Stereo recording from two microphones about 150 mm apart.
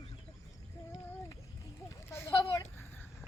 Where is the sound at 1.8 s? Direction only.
20° left (ahead or behind).